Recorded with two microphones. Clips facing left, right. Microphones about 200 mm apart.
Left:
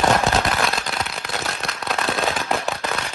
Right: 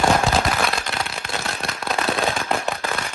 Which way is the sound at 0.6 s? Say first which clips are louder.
Even; centre (ahead or behind).